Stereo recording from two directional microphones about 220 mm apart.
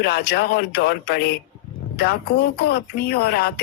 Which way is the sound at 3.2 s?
45° left (ahead or behind).